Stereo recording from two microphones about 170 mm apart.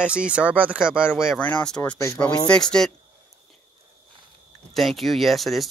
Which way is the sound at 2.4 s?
5° left (ahead or behind).